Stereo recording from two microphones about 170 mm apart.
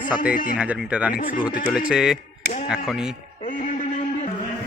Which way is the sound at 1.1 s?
55° left (ahead or behind).